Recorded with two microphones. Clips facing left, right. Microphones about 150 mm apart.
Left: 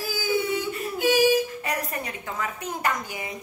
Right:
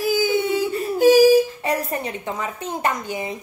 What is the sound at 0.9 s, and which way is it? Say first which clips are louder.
A child's voice: right 8 dB; 40° right (ahead or behind).